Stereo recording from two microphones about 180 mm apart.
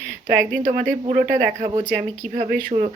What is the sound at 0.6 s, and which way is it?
Speech, 45° right (ahead or behind).